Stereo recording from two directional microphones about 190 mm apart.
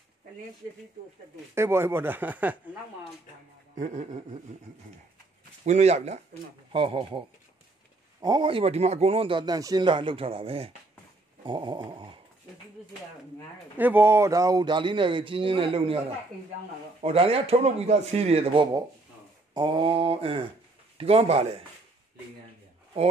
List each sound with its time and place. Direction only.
1.5 s speech: 15° right (ahead or behind)
3.7 s speech: 40° right (ahead or behind)
5.7 s speech: 35° right (ahead or behind)
13.7 s speech: 10° right (ahead or behind); by 16.0 s 30° right (ahead or behind)
17.0 s speech: 30° right (ahead or behind)